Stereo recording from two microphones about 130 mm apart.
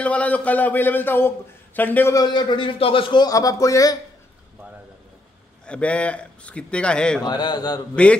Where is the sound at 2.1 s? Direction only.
35° left (ahead or behind).